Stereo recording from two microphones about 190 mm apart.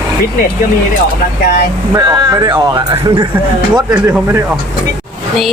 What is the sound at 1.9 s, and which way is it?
Speech, 20° right (ahead or behind).